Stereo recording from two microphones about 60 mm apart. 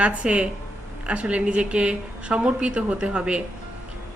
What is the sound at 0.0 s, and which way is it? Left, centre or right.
A woman's voice, centre.